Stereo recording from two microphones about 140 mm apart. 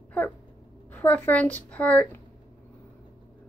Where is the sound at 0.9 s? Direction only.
10° left (ahead or behind).